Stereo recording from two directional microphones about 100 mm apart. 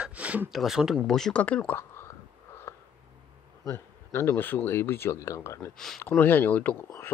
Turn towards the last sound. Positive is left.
turn(degrees=15)  # may be behind; listen again after turning